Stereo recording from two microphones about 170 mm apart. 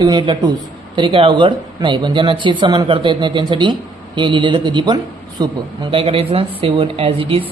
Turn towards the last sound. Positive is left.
turn(degrees=-30)  # may be behind; listen again after turning